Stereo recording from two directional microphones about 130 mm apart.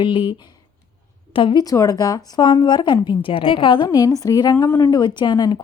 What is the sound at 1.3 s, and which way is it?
Speech, 40° left (ahead or behind).